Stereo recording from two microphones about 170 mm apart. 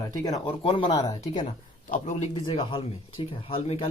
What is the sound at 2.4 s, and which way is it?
Speech, 30° left (ahead or behind).